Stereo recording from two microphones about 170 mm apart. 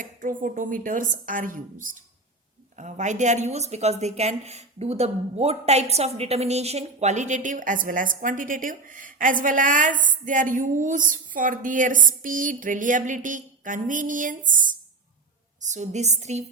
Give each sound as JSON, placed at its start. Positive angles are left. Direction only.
{"t": 0.0, "sound": "a woman's voice", "side_deg": -50}